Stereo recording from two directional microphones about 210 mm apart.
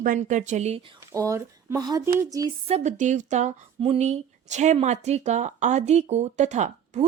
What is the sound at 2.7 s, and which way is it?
Speech, 35° right (ahead or behind).